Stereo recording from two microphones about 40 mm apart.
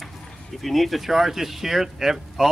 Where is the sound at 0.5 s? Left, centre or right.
Centre.